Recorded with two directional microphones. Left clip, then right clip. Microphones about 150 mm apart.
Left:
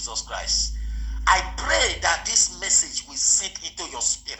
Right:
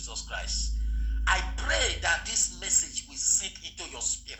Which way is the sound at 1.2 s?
35° left (ahead or behind).